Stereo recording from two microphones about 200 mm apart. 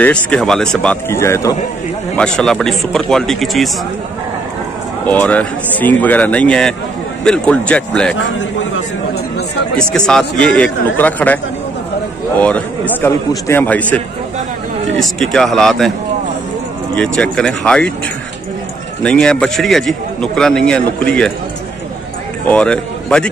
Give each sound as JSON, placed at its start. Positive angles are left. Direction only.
{"t": 0.0, "sound": "a man's voice", "side_deg": 5}
{"t": 5.0, "sound": "a man's voice", "side_deg": 10}
{"t": 8.2, "sound": "a man's voice", "side_deg": 70}
{"t": 9.8, "sound": "a man's voice", "side_deg": 5}
{"t": 12.4, "sound": "a man's voice", "side_deg": 5}
{"t": 16.9, "sound": "a man's voice", "side_deg": 5}
{"t": 19.0, "sound": "a man's voice", "side_deg": 5}
{"t": 22.5, "sound": "a man's voice", "side_deg": 5}